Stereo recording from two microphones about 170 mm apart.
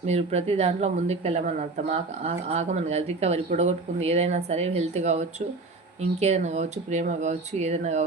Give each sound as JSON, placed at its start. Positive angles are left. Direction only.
{"t": 0.0, "sound": "speech", "side_deg": -40}